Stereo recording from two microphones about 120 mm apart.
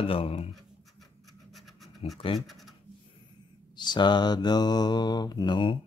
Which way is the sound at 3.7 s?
40° left (ahead or behind).